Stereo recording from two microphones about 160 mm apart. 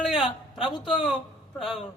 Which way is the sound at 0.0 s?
Centre (ahead or behind).